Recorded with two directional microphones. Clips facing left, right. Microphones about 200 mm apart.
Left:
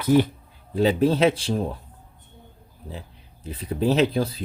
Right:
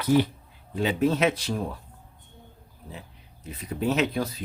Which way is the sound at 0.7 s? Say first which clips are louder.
Left 4 dB; 35° left (ahead or behind).